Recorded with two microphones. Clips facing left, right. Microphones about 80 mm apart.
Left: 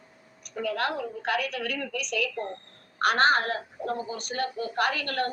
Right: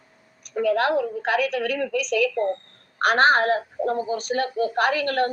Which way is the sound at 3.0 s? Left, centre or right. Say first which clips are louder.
Right 5 dB; right.